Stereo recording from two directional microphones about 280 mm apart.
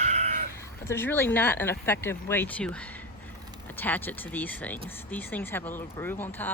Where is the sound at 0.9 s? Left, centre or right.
Centre.